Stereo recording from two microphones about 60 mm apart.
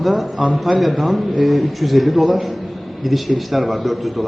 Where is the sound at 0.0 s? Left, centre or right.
Centre.